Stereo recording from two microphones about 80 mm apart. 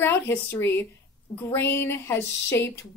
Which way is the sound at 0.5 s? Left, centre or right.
Left.